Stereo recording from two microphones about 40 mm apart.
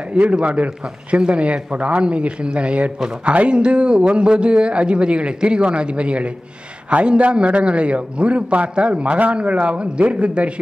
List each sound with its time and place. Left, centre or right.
0.1 s a man's voice: right